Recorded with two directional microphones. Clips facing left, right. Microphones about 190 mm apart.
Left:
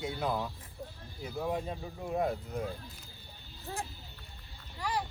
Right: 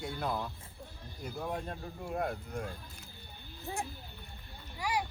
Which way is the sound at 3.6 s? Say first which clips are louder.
Right 1 dB; 15° right (ahead or behind).